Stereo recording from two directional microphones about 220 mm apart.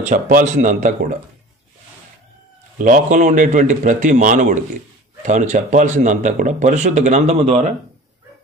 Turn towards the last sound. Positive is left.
turn(degrees=-30)  # may be behind; listen again after turning